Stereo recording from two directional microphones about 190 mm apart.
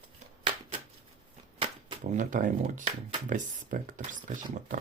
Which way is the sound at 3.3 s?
40° right (ahead or behind).